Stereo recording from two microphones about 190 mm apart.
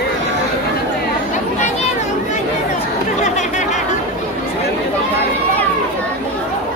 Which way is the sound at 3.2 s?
40° left (ahead or behind).